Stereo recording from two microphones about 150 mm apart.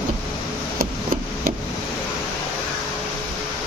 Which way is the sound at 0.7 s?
75° right (ahead or behind).